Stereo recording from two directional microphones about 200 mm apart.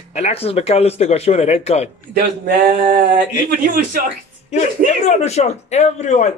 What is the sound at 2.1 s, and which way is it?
Speech, 45° right (ahead or behind).